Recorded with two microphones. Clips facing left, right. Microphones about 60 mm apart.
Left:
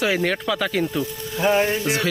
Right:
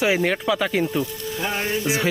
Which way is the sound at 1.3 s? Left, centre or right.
Centre.